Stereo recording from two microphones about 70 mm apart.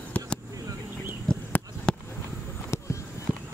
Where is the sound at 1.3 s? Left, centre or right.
Centre.